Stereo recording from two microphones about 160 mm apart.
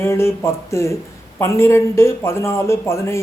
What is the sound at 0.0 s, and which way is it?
Speech, 15° left (ahead or behind).